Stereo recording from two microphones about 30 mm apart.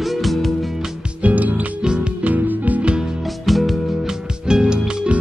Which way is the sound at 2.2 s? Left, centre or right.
Right.